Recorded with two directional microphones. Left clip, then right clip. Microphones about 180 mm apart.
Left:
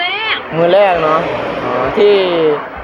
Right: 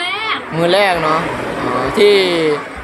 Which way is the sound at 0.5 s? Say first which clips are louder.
Left 3 dB; 25° right (ahead or behind).